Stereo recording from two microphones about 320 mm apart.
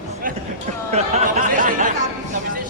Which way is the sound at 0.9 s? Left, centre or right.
Right.